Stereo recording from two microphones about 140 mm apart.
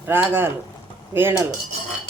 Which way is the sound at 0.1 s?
15° right (ahead or behind).